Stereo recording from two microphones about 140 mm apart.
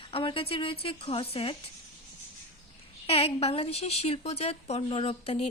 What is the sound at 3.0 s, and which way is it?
A woman's voice, 45° left (ahead or behind).